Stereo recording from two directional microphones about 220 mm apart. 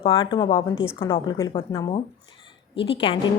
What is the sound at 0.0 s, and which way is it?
A woman's voice, 25° left (ahead or behind).